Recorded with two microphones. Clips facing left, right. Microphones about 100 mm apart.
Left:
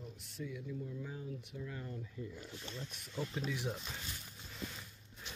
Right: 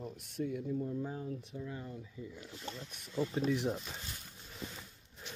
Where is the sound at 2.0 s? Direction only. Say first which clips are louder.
Left 1 dB; 5° right (ahead or behind).